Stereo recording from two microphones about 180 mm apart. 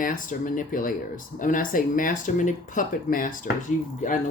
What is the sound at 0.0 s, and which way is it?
Speech, 45° left (ahead or behind).